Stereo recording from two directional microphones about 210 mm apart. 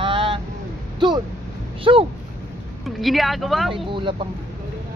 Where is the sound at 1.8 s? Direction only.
25° right (ahead or behind).